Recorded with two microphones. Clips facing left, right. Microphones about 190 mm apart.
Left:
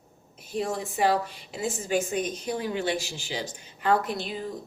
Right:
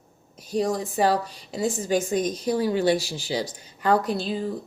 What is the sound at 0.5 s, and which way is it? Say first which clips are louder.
Speech: right 5 dB; 35° right (ahead or behind).